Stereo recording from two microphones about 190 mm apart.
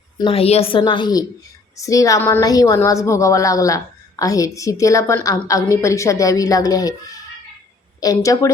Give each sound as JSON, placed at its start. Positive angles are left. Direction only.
{"t": 0.2, "sound": "a woman's voice", "side_deg": 30}